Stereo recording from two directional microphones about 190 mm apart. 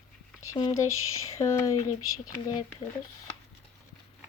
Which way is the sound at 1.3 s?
15° left (ahead or behind).